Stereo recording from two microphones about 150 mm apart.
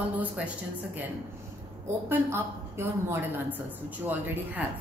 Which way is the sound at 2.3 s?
15° right (ahead or behind).